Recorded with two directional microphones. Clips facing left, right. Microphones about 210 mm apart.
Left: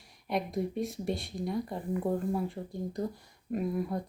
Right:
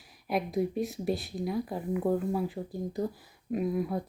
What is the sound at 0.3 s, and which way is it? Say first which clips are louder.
Speech: right 3 dB; centre (ahead or behind).